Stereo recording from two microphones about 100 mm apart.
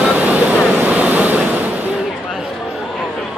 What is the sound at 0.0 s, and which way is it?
Vehicle, 15° right (ahead or behind).